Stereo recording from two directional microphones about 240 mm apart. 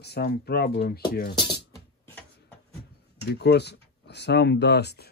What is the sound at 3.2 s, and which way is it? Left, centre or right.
Speech, left.